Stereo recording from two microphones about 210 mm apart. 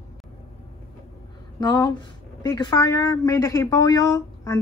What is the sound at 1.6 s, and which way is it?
Speech, 20° left (ahead or behind).